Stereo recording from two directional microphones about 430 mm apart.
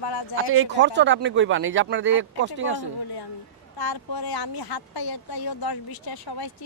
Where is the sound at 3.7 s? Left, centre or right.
Left.